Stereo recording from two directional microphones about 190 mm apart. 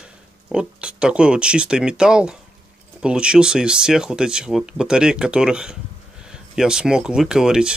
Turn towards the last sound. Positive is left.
turn(degrees=-5)  # may be behind; listen again after turning